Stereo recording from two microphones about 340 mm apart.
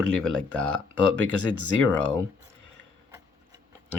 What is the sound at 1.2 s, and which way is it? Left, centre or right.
Speech, right.